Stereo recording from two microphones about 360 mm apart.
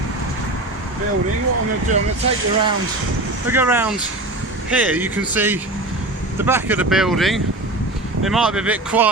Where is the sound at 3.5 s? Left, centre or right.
Centre.